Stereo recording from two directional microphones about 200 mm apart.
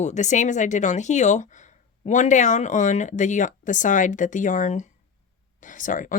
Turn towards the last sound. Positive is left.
turn(degrees=40)  # may be behind; listen again after turning